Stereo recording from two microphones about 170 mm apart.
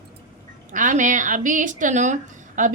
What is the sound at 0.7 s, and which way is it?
A woman's voice, 50° right (ahead or behind).